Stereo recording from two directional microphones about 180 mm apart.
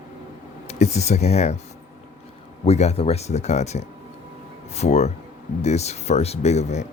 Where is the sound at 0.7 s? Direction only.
40° left (ahead or behind).